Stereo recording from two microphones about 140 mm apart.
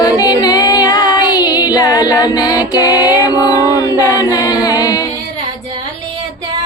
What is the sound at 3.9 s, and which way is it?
A capella, 25° left (ahead or behind).